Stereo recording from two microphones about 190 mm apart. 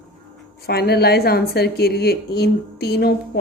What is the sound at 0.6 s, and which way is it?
A woman's voice, 55° left (ahead or behind).